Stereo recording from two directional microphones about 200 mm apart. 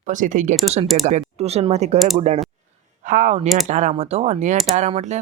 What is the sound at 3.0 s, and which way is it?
Speech, 40° right (ahead or behind).